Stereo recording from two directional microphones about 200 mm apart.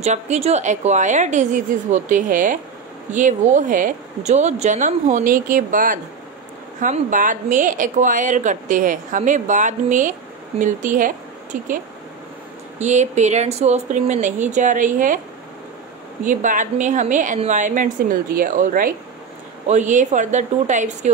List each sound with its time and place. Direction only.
0.0 s a woman's voice: 35° right (ahead or behind)
12.7 s a woman's voice: 35° right (ahead or behind)
16.3 s a woman's voice: 40° right (ahead or behind)